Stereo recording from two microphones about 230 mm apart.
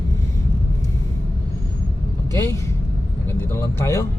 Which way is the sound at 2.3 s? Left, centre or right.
Centre.